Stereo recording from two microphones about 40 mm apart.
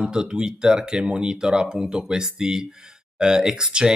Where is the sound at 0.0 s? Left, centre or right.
Right.